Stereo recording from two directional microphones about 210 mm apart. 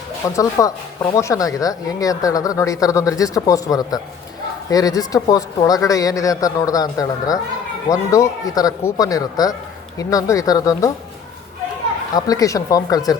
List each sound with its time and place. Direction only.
0.2 s speech: 15° left (ahead or behind)
12.1 s speech: 15° left (ahead or behind)